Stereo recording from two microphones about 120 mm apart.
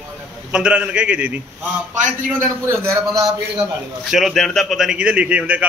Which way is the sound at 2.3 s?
20° right (ahead or behind).